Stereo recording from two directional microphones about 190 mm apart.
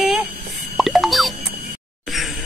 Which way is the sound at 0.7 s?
Centre (ahead or behind).